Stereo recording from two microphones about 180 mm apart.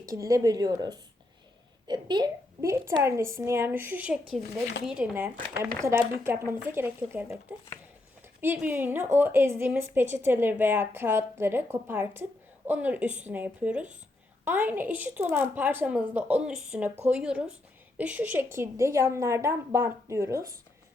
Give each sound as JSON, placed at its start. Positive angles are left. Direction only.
{"t": 0.1, "sound": "a woman's voice", "side_deg": -20}
{"t": 8.4, "sound": "a woman's voice", "side_deg": -10}